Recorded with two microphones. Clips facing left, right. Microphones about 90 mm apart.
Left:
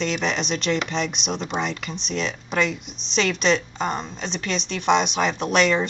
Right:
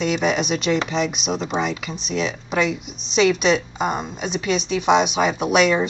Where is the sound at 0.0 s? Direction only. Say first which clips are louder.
Right 4 dB; 10° right (ahead or behind).